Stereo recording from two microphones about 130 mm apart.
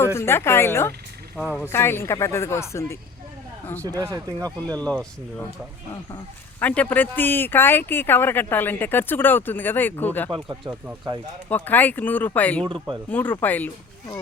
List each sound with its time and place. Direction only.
0.0 s speech: 20° left (ahead or behind)
3.8 s speech: 25° right (ahead or behind)
4.8 s speech: 10° left (ahead or behind)
6.6 s speech: 10° left (ahead or behind)
10.3 s speech: 40° right (ahead or behind)
11.4 s speech: 15° left (ahead or behind)